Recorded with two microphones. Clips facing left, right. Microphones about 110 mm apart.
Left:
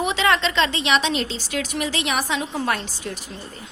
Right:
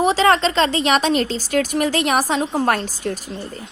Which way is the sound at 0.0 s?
35° right (ahead or behind).